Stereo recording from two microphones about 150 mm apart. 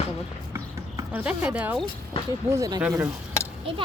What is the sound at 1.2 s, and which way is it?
Speech, 10° right (ahead or behind).